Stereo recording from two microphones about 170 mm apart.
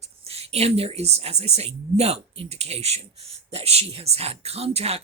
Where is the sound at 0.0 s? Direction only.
35° right (ahead or behind).